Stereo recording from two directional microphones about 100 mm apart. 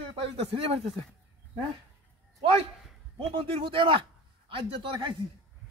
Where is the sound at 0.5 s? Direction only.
70° right (ahead or behind).